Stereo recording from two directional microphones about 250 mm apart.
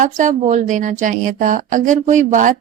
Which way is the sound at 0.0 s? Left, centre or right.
Right.